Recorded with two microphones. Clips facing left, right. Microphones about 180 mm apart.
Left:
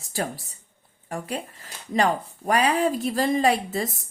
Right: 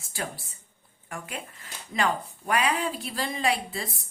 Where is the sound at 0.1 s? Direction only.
40° left (ahead or behind).